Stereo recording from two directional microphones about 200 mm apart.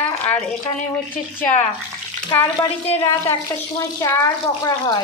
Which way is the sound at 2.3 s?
15° left (ahead or behind).